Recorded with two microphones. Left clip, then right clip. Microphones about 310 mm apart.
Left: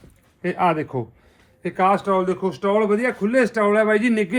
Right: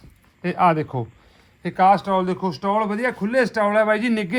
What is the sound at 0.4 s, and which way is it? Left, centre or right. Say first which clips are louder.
Speech: right 2 dB; right.